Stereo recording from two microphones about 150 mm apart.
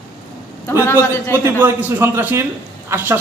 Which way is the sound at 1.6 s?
15° right (ahead or behind).